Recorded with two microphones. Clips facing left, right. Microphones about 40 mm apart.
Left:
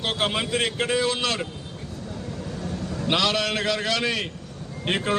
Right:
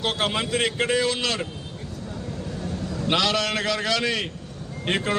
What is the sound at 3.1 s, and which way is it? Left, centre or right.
A man's voice, centre.